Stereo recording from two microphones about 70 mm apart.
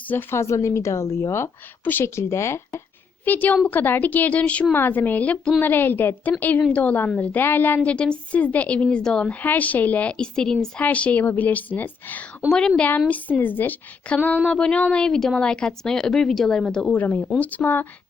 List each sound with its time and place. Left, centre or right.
0.1 s a woman's voice: left
0.3 s a woman's voice: left
2.0 s speech: left
3.2 s a woman's voice: left
7.8 s speech: centre
9.4 s a woman's voice: left
12.5 s speech: centre
13.1 s a woman's voice: left
16.9 s a woman's voice: left